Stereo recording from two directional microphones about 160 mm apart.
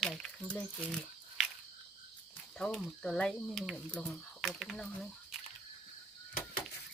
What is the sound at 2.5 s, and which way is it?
Speech, centre (ahead or behind).